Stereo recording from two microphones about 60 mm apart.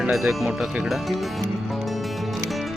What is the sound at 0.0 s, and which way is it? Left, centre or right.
Speech, centre.